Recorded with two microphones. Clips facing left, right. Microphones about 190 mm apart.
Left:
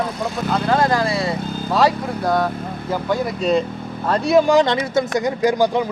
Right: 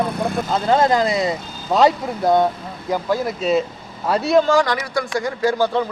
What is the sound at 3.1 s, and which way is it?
Speech, centre (ahead or behind).